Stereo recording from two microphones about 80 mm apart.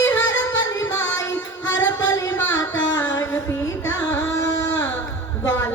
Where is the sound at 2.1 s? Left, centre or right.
Left.